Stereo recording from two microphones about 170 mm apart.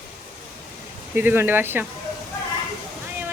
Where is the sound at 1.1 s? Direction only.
10° right (ahead or behind).